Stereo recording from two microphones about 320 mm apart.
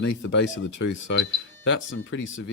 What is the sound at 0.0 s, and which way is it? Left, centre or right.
Speech, left.